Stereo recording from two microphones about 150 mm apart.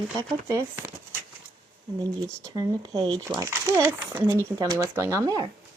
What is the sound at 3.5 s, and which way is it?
Speech, 15° right (ahead or behind).